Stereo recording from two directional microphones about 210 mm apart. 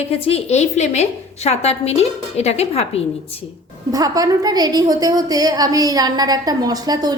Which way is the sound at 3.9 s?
15° right (ahead or behind).